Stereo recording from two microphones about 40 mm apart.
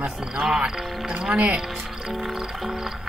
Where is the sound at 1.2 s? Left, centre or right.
Right.